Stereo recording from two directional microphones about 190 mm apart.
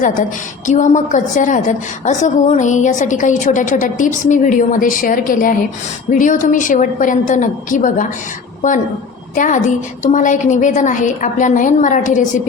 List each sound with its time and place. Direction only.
0.0 s a woman's voice: 45° left (ahead or behind)
9.3 s a woman's voice: 40° left (ahead or behind)